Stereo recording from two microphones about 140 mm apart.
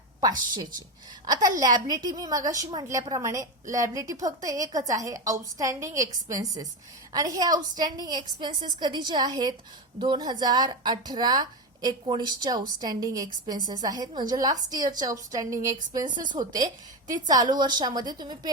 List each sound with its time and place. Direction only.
0.2 s a woman's voice: 25° right (ahead or behind)